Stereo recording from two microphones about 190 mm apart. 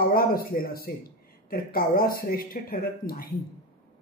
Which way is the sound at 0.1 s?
50° left (ahead or behind).